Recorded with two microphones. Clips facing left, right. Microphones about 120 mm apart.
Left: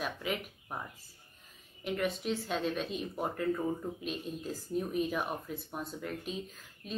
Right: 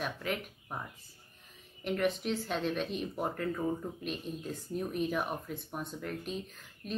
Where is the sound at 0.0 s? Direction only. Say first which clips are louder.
Even; 5° left (ahead or behind).